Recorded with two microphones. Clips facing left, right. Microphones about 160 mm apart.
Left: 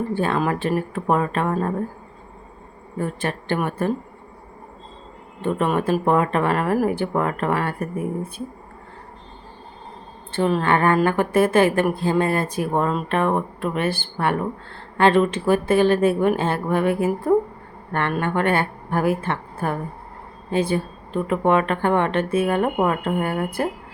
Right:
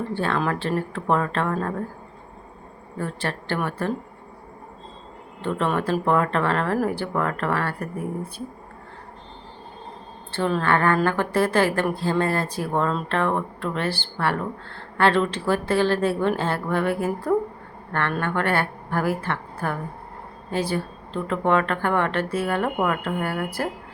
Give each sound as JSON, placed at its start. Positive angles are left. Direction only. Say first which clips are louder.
{"t": 0.2, "sound": "speech", "louder": "left 2 dB", "side_deg": 15}
{"t": 3.0, "sound": "speech", "louder": "left 3 dB", "side_deg": 15}
{"t": 5.5, "sound": "speech", "louder": "left 3 dB", "side_deg": 15}
{"t": 10.3, "sound": "speech", "louder": "left 3 dB", "side_deg": 15}